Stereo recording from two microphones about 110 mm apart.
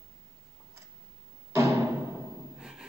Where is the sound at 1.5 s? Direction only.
25° right (ahead or behind).